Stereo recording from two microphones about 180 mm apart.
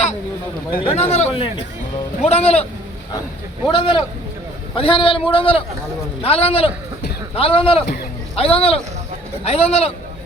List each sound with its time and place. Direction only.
0.8 s speech: 35° left (ahead or behind)
3.7 s a man's voice: 25° left (ahead or behind)